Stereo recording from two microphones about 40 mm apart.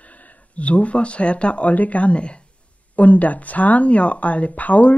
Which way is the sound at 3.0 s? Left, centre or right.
Left.